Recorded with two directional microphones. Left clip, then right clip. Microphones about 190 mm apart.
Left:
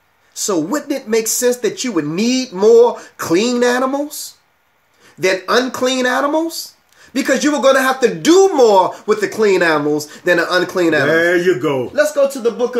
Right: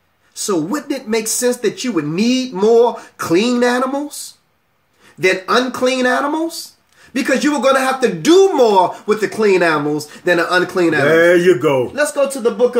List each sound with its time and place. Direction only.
0.4 s speech: 20° left (ahead or behind)
5.2 s speech: 20° left (ahead or behind)
11.1 s a man's voice: 15° right (ahead or behind)
11.9 s speech: 15° left (ahead or behind)